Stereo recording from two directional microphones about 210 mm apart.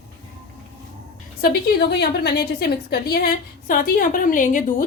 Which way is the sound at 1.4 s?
50° left (ahead or behind).